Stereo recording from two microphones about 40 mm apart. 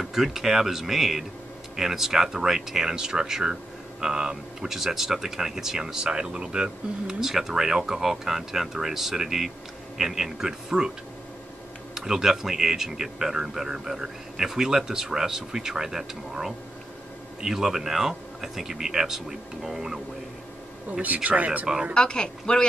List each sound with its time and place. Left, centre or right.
0.0 s speech: centre
7.1 s speech: centre
11.9 s speech: centre
21.0 s speech: right
21.9 s speech: left